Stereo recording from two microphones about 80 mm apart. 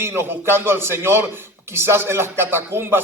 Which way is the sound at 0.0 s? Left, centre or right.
Right.